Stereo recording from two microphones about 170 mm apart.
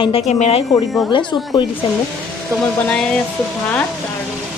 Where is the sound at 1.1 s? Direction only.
30° left (ahead or behind).